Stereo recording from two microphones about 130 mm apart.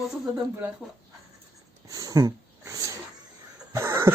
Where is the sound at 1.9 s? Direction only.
25° right (ahead or behind).